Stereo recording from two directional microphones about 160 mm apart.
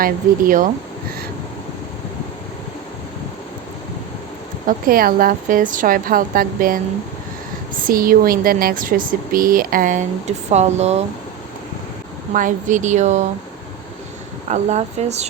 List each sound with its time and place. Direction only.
0.0 s speech: 60° right (ahead or behind)
4.6 s speech: 65° right (ahead or behind)
7.9 s speech: 65° right (ahead or behind); by 11.0 s 45° right (ahead or behind)
12.3 s speech: 55° right (ahead or behind)
14.5 s speech: 45° right (ahead or behind)